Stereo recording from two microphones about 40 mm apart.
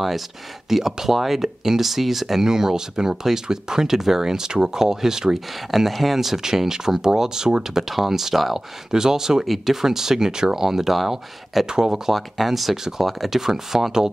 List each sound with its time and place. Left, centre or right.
0.7 s speech: centre
5.7 s speech: centre
7.9 s speech: centre